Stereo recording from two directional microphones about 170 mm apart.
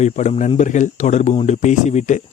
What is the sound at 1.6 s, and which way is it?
Speech, 45° left (ahead or behind).